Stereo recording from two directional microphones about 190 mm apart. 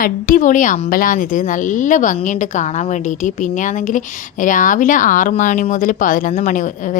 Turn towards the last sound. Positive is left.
turn(degrees=40)  # may be behind; listen again after turning